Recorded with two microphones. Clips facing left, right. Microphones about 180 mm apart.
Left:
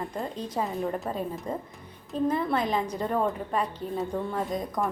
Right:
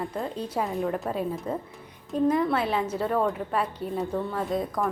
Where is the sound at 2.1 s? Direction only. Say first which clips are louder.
Right 3 dB; 10° right (ahead or behind).